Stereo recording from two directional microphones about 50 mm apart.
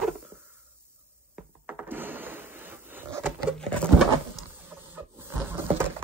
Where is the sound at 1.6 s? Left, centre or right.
Right.